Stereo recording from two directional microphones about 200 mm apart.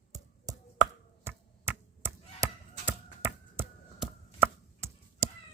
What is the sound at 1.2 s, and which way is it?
Chop, 10° right (ahead or behind).